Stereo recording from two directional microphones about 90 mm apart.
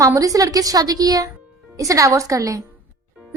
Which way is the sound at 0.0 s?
40° right (ahead or behind).